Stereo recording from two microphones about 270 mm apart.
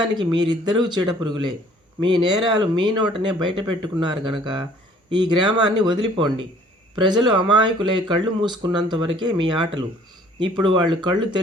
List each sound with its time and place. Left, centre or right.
0.0 s speech: centre